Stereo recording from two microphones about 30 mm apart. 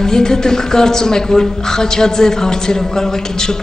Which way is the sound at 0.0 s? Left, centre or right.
Left.